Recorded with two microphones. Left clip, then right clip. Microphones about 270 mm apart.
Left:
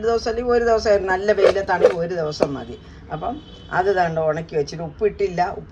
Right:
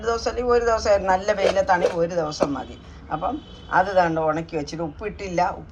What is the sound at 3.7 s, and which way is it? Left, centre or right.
Speech, left.